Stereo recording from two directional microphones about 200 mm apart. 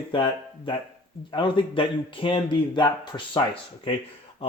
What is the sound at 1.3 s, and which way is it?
Speech, 25° left (ahead or behind).